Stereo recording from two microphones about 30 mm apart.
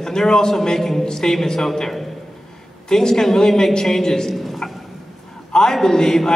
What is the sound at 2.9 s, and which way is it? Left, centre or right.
A man's voice, centre.